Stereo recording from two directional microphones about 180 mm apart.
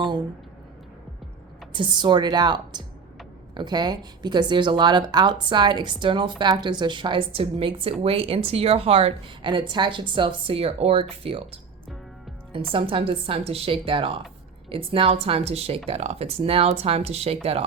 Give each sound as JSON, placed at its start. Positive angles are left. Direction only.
{"t": 1.7, "sound": "a woman's voice", "side_deg": -25}
{"t": 12.7, "sound": "a woman's voice", "side_deg": -30}